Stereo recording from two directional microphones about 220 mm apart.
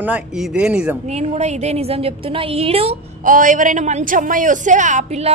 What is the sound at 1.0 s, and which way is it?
A woman's voice, 30° right (ahead or behind).